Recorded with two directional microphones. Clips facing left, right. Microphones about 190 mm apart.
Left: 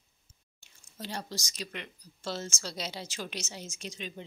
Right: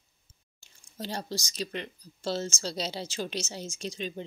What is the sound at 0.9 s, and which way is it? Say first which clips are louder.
Speech: right 4 dB; 30° right (ahead or behind).